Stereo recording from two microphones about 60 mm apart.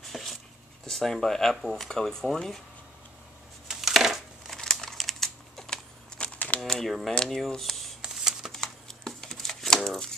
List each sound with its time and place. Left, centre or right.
0.1 s dog: centre
0.8 s speech: centre
3.6 s crushing: centre
4.6 s computer keyboard: centre
6.1 s a sound: left
6.6 s speech: centre
8.0 s computer keyboard: centre
8.5 s computer keyboard: centre
9.3 s a sound: centre